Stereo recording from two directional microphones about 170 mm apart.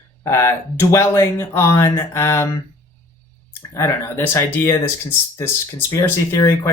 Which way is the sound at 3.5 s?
15° left (ahead or behind).